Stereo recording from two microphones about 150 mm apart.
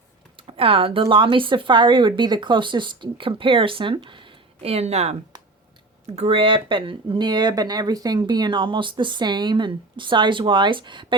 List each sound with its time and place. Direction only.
0.3 s speech: 35° right (ahead or behind)